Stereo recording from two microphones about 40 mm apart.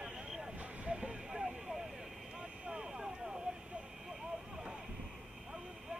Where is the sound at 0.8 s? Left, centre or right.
Right.